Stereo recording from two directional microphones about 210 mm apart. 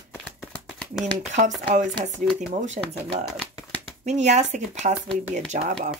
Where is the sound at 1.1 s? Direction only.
35° right (ahead or behind).